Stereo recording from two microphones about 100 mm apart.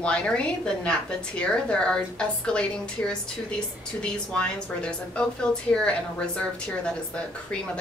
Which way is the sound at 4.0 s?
10° left (ahead or behind).